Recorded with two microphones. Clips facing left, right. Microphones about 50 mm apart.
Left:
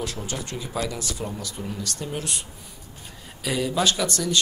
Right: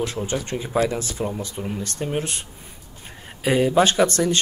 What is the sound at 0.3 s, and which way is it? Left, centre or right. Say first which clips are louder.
Speech: right 6 dB; right.